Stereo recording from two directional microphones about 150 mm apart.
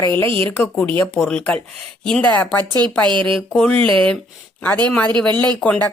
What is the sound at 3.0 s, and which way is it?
Speech, 35° right (ahead or behind).